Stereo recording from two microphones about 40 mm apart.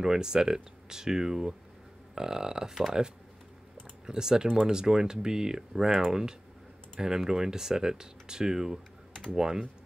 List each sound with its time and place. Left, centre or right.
0.0 s speech: centre
4.0 s speech: centre